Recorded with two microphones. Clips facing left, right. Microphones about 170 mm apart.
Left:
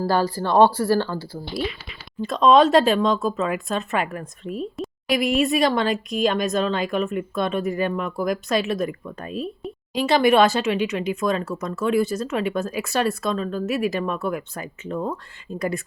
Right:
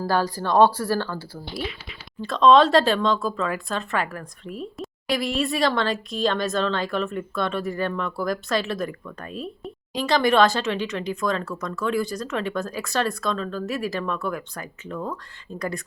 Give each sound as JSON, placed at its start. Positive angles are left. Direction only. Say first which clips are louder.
{"t": 0.0, "sound": "speech", "louder": "left 2 dB", "side_deg": 10}